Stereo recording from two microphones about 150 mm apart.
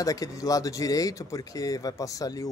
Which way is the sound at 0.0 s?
25° left (ahead or behind).